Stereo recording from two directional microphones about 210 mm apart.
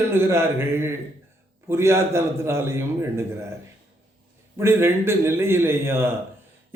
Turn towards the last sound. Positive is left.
turn(degrees=-10)  # may be behind; listen again after turning